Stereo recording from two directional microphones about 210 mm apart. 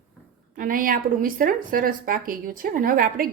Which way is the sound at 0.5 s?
40° right (ahead or behind).